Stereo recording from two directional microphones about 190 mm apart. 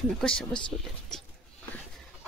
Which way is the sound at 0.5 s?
25° left (ahead or behind).